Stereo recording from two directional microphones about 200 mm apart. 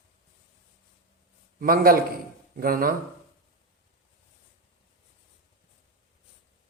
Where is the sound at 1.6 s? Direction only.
45° right (ahead or behind).